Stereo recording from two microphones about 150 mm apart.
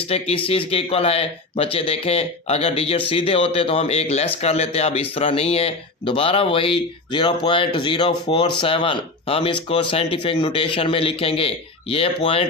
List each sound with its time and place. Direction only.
0.1 s speech: 40° left (ahead or behind)